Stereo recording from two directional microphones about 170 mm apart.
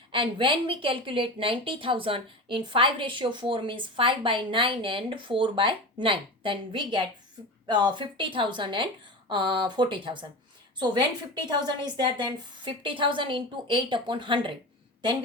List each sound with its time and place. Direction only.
0.1 s a woman's voice: 30° right (ahead or behind)